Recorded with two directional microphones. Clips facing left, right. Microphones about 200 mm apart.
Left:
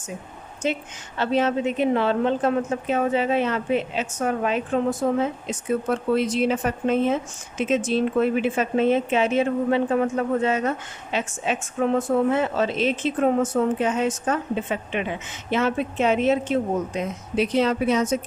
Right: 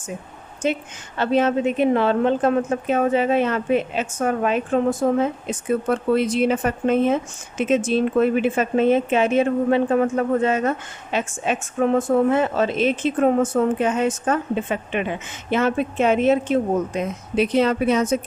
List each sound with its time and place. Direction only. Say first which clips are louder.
0.6 s a woman's voice: right 3 dB; 50° right (ahead or behind)